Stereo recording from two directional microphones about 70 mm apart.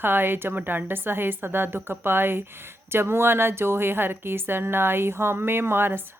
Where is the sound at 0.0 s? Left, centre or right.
Right.